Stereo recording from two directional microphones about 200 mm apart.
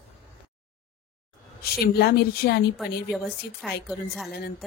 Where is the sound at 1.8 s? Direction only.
50° left (ahead or behind).